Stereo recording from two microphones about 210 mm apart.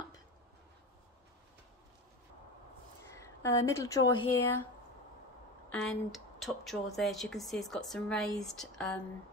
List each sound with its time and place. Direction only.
3.1 s speech: 15° left (ahead or behind)
5.7 s speech: centre (ahead or behind)